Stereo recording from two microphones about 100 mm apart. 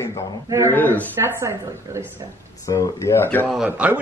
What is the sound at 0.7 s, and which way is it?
Speech, 20° left (ahead or behind).